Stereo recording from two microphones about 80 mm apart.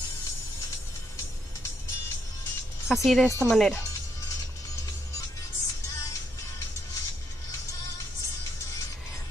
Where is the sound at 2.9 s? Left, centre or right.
Centre.